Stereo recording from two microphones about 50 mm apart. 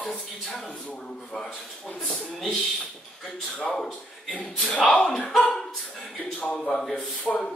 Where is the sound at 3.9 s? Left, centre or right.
Left.